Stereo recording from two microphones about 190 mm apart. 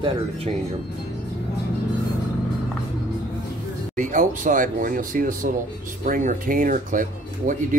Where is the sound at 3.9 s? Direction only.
45° right (ahead or behind).